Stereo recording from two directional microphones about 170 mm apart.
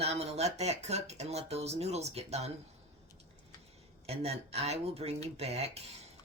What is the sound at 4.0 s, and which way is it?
Speech, 35° right (ahead or behind).